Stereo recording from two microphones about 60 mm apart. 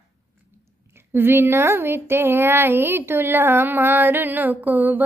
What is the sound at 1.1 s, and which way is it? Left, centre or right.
Speech, right.